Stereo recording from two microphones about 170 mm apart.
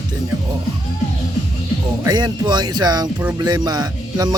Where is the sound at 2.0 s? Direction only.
20° right (ahead or behind).